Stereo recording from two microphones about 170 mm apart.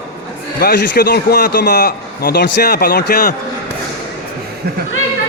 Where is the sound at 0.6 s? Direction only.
60° left (ahead or behind).